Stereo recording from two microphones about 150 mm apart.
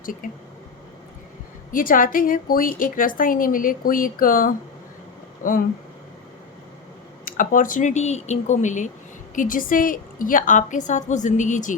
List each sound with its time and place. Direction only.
0.0 s speech: 65° left (ahead or behind)
1.7 s a woman's voice: 70° left (ahead or behind)
7.3 s a woman's voice: 65° left (ahead or behind)